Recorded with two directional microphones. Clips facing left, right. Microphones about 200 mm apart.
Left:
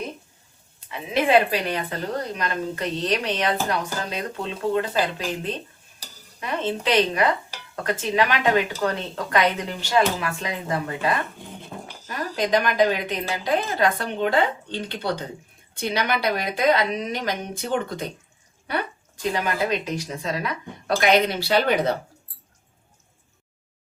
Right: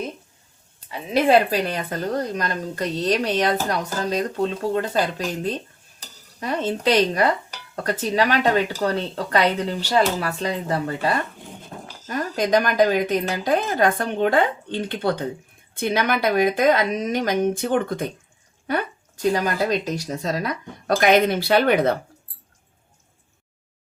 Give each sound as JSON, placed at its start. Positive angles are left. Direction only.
{"t": 0.9, "sound": "a woman's voice", "side_deg": -40}